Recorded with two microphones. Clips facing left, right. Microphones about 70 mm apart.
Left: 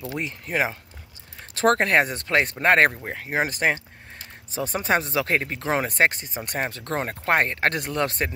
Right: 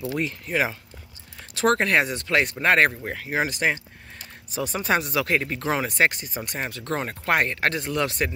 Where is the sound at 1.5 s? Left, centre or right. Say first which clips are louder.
Left 1 dB; left.